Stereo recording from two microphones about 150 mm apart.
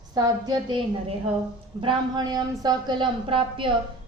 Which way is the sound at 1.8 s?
30° right (ahead or behind).